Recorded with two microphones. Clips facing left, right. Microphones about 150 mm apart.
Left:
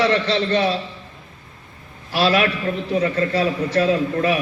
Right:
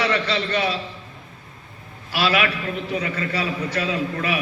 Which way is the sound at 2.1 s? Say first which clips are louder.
Left 4 dB; 35° left (ahead or behind).